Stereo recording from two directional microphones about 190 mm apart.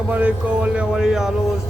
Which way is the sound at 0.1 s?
5° right (ahead or behind).